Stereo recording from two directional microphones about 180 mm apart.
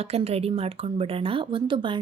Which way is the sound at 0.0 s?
35° right (ahead or behind).